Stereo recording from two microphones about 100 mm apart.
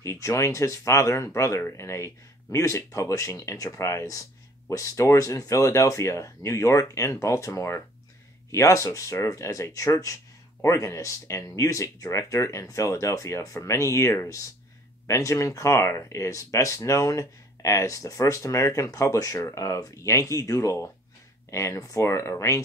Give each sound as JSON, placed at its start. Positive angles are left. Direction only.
{"t": 0.0, "sound": "speech", "side_deg": 30}